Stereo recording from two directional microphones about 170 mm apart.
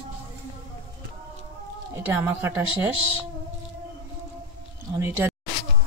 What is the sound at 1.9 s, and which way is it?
Speech, 15° right (ahead or behind).